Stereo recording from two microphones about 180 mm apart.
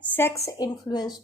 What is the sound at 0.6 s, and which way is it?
Speech, 20° left (ahead or behind).